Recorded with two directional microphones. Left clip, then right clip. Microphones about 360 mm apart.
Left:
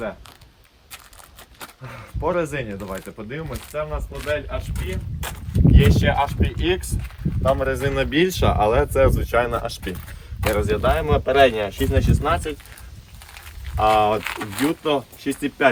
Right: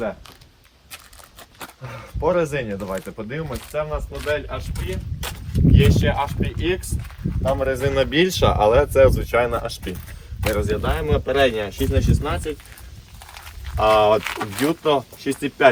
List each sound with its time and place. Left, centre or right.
1.5 s speech: centre
10.4 s speech: left
11.9 s speech: centre
13.3 s speech: centre